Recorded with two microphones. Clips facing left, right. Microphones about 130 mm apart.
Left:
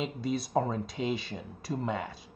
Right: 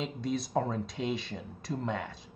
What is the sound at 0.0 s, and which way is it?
Speech, centre (ahead or behind).